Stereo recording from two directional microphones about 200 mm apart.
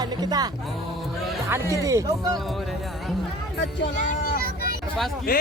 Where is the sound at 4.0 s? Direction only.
45° left (ahead or behind).